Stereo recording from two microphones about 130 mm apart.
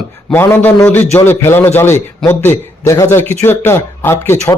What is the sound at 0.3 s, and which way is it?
A man's voice, 15° left (ahead or behind).